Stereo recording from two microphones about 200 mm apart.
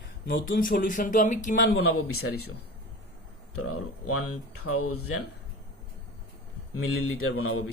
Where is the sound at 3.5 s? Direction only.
90° left.